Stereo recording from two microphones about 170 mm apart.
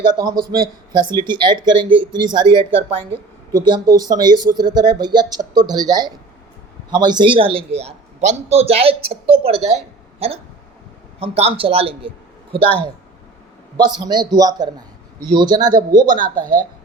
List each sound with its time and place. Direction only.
0.0 s a man's voice: 25° right (ahead or behind)
14.0 s speech: 25° right (ahead or behind)
16.2 s speech: 55° right (ahead or behind)